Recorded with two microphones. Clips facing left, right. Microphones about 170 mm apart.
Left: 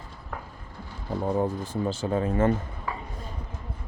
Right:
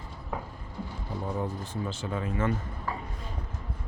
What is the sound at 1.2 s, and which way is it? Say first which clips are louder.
Speech: left 7 dB; 35° left (ahead or behind).